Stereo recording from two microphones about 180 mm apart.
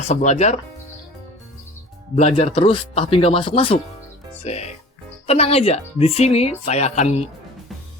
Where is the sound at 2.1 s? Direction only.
40° left (ahead or behind).